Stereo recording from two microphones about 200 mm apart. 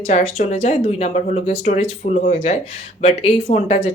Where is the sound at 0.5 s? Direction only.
30° left (ahead or behind).